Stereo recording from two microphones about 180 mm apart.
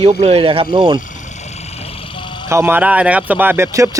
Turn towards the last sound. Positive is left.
turn(degrees=-15)  # may be behind; listen again after turning